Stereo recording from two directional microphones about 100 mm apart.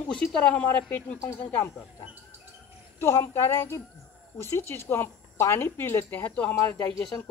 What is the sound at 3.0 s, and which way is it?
Speech, 25° left (ahead or behind).